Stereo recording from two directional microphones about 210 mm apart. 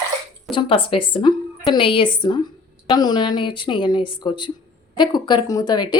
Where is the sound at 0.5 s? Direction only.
25° left (ahead or behind).